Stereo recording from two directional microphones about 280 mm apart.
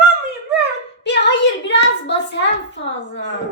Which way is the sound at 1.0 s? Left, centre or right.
Left.